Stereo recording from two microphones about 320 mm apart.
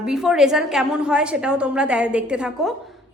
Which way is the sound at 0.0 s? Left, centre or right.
Centre.